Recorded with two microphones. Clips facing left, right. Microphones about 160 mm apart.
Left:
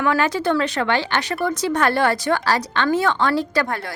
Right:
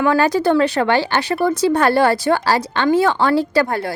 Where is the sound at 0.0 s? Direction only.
35° right (ahead or behind).